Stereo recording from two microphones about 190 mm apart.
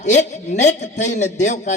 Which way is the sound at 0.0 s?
35° left (ahead or behind).